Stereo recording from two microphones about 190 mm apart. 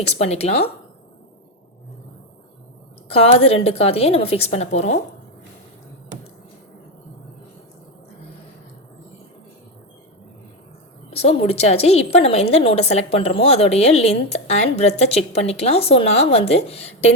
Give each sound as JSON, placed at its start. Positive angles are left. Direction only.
{"t": 0.3, "sound": "a woman's voice", "side_deg": 35}
{"t": 3.1, "sound": "a woman's voice", "side_deg": 30}
{"t": 11.1, "sound": "a woman's voice", "side_deg": 30}